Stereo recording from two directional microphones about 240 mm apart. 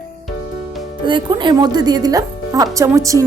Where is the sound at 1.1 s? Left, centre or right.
Centre.